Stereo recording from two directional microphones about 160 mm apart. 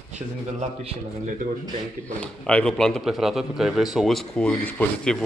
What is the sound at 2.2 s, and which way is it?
A man's voice, 5° left (ahead or behind).